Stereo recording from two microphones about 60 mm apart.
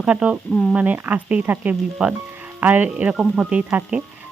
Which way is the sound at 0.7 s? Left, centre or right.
Right.